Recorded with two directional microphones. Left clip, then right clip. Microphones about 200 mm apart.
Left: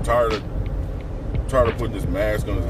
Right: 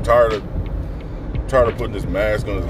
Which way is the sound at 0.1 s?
10° right (ahead or behind).